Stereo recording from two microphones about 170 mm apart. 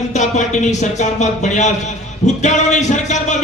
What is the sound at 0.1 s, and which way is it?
Speech, 45° left (ahead or behind).